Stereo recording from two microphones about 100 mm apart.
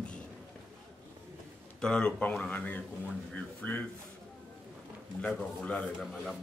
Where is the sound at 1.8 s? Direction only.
10° left (ahead or behind).